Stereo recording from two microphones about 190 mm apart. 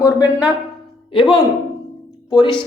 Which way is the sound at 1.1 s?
25° left (ahead or behind).